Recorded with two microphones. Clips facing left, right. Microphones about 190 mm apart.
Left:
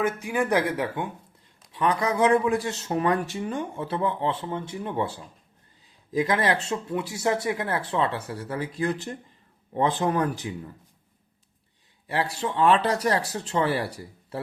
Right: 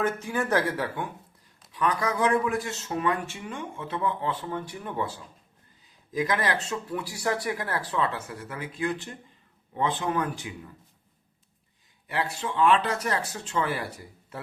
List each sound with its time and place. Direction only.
0.0 s speech: 15° left (ahead or behind); by 10.5 s 40° left (ahead or behind)
12.0 s speech: 35° left (ahead or behind)